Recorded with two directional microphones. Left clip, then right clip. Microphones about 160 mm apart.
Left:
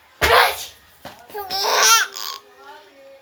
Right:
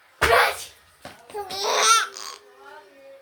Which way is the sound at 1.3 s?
10° right (ahead or behind).